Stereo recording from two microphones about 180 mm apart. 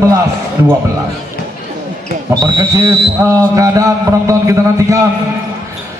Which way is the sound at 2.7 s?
20° right (ahead or behind).